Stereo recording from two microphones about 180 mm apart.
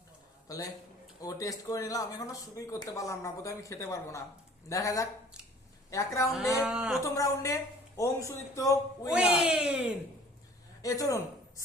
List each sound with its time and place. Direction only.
0.4 s a man's voice: 20° left (ahead or behind)
6.6 s speech: 5° right (ahead or behind)
7.0 s speech: 15° left (ahead or behind)
9.1 s speech: 5° right (ahead or behind)
10.8 s speech: 20° left (ahead or behind)